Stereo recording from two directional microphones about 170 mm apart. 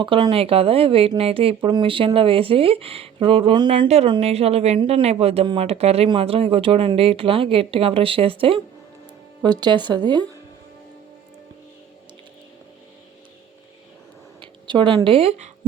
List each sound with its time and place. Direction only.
0.0 s speech: 30° right (ahead or behind)
14.4 s speech: 30° right (ahead or behind)